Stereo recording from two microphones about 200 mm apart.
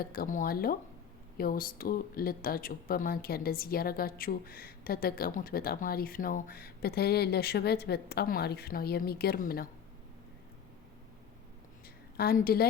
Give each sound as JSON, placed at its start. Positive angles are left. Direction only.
{"t": 0.0, "sound": "speech", "side_deg": 50}
{"t": 12.1, "sound": "speech", "side_deg": 50}